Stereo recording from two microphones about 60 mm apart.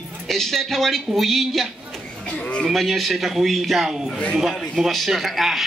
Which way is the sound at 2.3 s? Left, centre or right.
Left.